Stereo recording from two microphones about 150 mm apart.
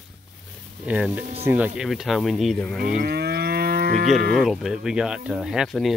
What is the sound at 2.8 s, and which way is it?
Moo, 70° right (ahead or behind).